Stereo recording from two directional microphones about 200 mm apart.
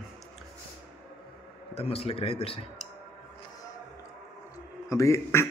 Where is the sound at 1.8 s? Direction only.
30° left (ahead or behind).